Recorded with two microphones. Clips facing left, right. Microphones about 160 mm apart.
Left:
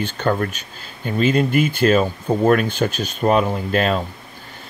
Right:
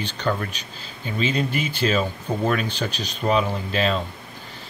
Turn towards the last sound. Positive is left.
turn(degrees=50)  # may be behind; listen again after turning